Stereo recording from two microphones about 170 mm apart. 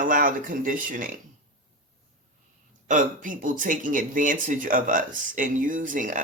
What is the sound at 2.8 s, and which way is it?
Speech, 50° right (ahead or behind).